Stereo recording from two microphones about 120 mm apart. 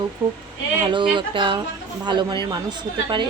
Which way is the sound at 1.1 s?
45° right (ahead or behind).